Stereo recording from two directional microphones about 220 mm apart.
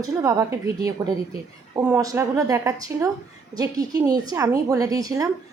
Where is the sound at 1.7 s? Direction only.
10° right (ahead or behind).